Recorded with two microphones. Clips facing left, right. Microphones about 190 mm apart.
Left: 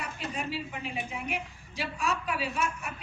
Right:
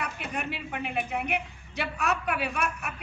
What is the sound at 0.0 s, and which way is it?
A woman's voice, 65° right (ahead or behind).